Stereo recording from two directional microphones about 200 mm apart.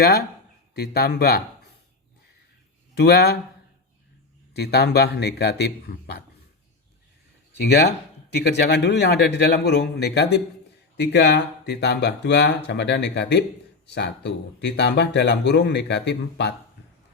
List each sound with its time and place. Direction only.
0.0 s speech: 50° left (ahead or behind)
2.9 s speech: 55° left (ahead or behind)
4.5 s speech: 55° left (ahead or behind)
7.7 s speech: 55° left (ahead or behind)